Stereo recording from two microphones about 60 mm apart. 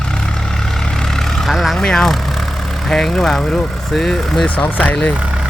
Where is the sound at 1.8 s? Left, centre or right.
Centre.